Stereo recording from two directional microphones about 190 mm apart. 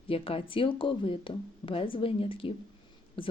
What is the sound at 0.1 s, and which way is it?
Speech, 30° left (ahead or behind).